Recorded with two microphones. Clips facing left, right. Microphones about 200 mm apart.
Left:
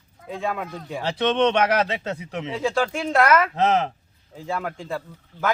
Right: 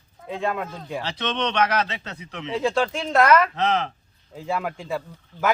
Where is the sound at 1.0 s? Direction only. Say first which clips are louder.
Left 8 dB; 50° left (ahead or behind).